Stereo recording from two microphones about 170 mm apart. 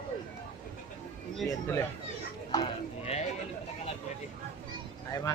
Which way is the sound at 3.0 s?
40° left (ahead or behind).